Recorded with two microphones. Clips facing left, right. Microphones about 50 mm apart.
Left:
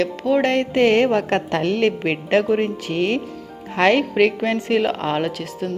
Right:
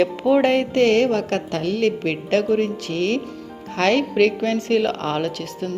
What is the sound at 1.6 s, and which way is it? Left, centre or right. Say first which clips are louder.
Speech: even; left.